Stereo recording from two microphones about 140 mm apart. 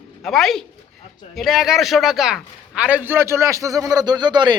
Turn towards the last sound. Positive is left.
turn(degrees=-30)  # may be behind; listen again after turning